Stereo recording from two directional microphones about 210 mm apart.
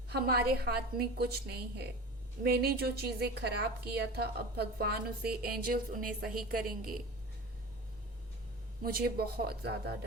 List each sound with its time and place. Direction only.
0.1 s a woman's voice: 45° right (ahead or behind)
8.8 s a woman's voice: 45° right (ahead or behind)